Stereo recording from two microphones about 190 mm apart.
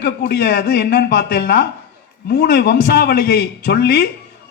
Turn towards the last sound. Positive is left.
turn(degrees=60)  # may be behind; listen again after turning